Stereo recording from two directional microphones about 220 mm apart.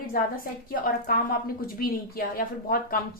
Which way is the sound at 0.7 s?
40° left (ahead or behind).